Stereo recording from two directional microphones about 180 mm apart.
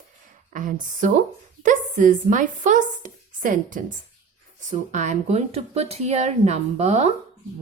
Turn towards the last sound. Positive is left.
turn(degrees=-35)  # may be behind; listen again after turning